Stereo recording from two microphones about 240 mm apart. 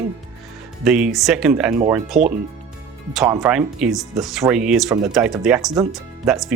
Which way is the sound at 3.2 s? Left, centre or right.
Centre.